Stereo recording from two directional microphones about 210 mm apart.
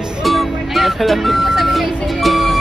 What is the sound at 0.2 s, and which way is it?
Music, centre (ahead or behind).